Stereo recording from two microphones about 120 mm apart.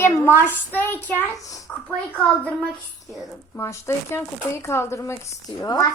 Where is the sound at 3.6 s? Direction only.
25° left (ahead or behind).